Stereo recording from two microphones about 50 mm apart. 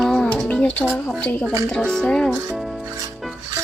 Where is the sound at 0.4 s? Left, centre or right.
Left.